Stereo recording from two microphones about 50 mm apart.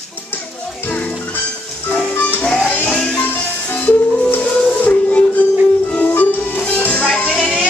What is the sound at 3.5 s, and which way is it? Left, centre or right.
Music, left.